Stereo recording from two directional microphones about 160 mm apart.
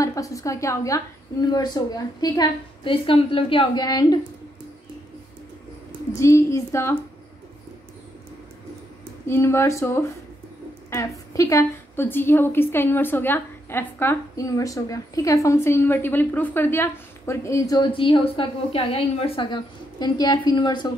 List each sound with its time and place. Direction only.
0.0 s a woman's voice: 20° left (ahead or behind)
6.1 s a woman's voice: 20° left (ahead or behind)
9.3 s a woman's voice: 15° left (ahead or behind)